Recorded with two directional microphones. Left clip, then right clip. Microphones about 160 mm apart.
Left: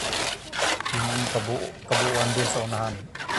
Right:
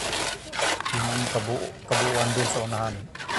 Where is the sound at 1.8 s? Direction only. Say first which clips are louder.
Left 1 dB; 25° right (ahead or behind).